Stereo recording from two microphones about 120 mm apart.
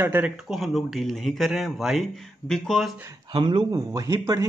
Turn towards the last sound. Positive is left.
turn(degrees=-25)  # may be behind; listen again after turning